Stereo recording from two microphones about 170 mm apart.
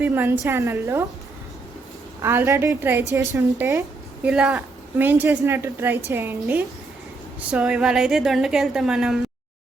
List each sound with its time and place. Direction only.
0.0 s a woman's voice: 10° right (ahead or behind)
2.2 s a woman's voice: 15° right (ahead or behind)